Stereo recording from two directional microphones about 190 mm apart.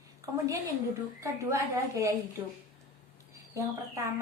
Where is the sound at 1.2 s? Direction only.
15° right (ahead or behind).